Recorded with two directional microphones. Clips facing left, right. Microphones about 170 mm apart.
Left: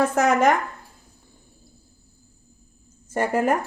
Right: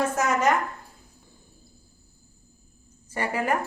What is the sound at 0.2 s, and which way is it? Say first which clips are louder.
Speech: left 6 dB; 60° left (ahead or behind).